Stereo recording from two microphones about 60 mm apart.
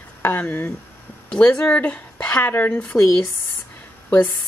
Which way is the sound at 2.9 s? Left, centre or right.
Left.